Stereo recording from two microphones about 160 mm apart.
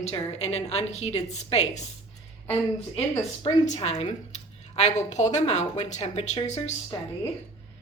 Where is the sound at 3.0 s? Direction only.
45° left (ahead or behind).